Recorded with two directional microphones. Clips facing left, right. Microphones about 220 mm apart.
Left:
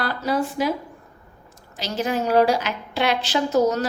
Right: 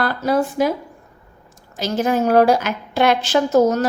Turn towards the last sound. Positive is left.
turn(degrees=-50)  # may be behind; listen again after turning